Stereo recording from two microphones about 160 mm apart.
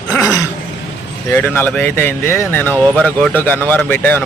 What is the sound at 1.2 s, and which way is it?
Speech, 15° left (ahead or behind).